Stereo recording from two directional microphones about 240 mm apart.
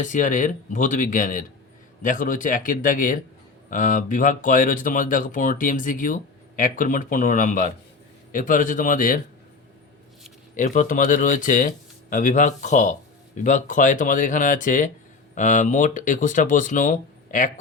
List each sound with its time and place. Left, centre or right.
0.0 s speech: left
10.6 s speech: left